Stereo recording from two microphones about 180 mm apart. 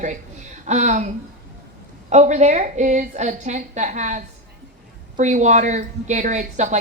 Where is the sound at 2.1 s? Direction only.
40° right (ahead or behind).